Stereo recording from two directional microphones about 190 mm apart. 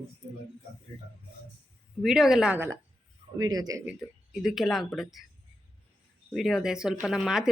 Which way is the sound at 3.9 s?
Centre (ahead or behind).